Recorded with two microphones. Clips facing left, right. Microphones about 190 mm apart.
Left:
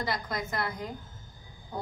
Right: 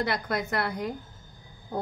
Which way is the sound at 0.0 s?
65° right (ahead or behind).